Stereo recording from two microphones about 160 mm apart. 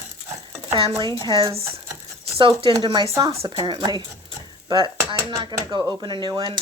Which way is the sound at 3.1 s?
20° right (ahead or behind).